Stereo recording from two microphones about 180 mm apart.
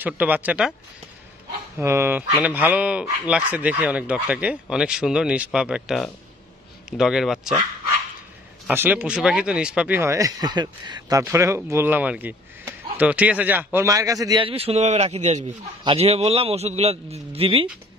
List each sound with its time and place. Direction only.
0.0 s speech: 10° right (ahead or behind)
1.8 s speech: 15° right (ahead or behind)
8.6 s a man's voice: 10° right (ahead or behind); by 17.6 s 30° right (ahead or behind)